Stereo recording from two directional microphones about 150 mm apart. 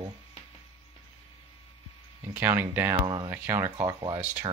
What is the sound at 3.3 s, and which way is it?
Speech, 15° right (ahead or behind).